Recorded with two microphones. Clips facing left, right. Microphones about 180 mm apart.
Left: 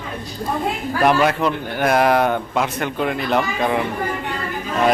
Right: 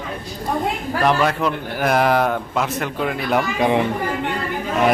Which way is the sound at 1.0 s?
5° left (ahead or behind).